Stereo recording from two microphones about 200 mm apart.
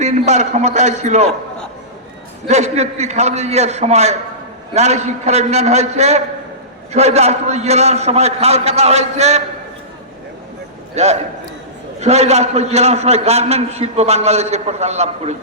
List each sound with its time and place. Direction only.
0.0 s a man's voice: 35° right (ahead or behind)
2.5 s a man's voice: 35° right (ahead or behind)
10.9 s a man's voice: 35° right (ahead or behind)